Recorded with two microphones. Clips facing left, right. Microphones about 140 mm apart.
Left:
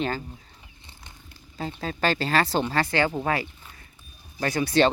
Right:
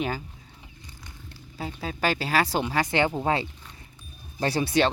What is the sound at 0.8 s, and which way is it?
Cat, 25° left (ahead or behind).